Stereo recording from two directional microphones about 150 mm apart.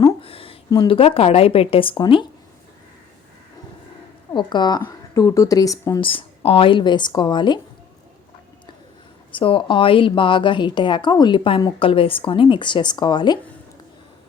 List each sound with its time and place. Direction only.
0.2 s a sound: 40° left (ahead or behind)
0.9 s a woman's voice: 40° left (ahead or behind)
4.3 s speech: 30° left (ahead or behind)
6.0 s a woman's voice: 35° left (ahead or behind)
9.3 s a woman's voice: 35° left (ahead or behind)